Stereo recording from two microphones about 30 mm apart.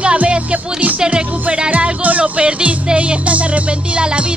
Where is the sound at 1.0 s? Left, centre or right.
Right.